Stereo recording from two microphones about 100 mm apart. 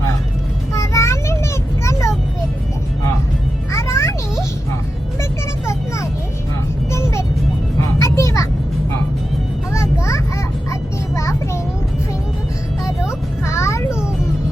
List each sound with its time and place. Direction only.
0.7 s a sound: 30° left (ahead or behind)
3.7 s music: 30° left (ahead or behind)
5.6 s vehicle: 30° left (ahead or behind)
6.9 s music: 30° left (ahead or behind)
8.0 s vehicle: 30° left (ahead or behind)
9.7 s a sound: 30° left (ahead or behind)
13.4 s music: 30° left (ahead or behind)